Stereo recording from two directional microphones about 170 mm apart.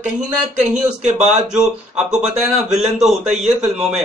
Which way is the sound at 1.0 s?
45° right (ahead or behind).